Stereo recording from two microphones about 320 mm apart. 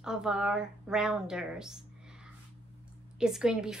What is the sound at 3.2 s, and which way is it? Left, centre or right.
Speech, centre.